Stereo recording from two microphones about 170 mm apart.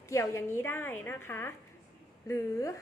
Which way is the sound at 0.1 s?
15° left (ahead or behind).